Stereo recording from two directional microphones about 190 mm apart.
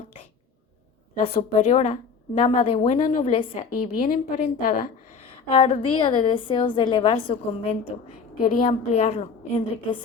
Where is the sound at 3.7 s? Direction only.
45° left (ahead or behind).